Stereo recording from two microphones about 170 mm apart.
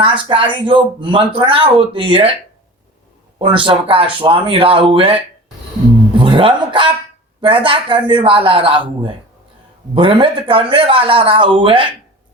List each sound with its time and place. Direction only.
0.0 s speech: 30° right (ahead or behind)
3.3 s speech: 30° right (ahead or behind)